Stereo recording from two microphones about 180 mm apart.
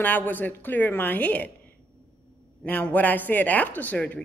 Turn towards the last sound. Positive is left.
turn(degrees=10)  # may be behind; listen again after turning